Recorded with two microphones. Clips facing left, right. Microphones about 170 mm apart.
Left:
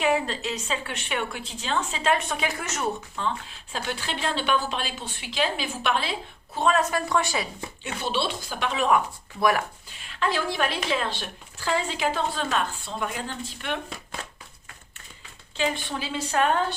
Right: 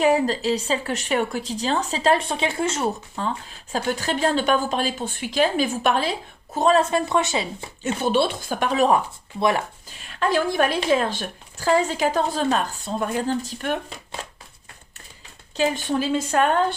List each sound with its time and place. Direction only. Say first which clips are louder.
0.0 s speech: right 6 dB; 40° right (ahead or behind); by 7.4 s 20° right (ahead or behind)
8.0 s a woman's voice: right 7 dB; 50° right (ahead or behind)
9.4 s speech: right 2 dB; 25° right (ahead or behind)
10.1 s a woman's voice: right 5 dB; 45° right (ahead or behind)
15.5 s a woman's voice: right 6 dB; 40° right (ahead or behind)